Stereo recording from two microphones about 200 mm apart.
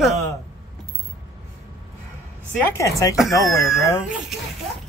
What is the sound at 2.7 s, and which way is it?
Speech, 15° left (ahead or behind).